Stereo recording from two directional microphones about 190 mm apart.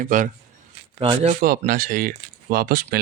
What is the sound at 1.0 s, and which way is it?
Speech, 30° right (ahead or behind).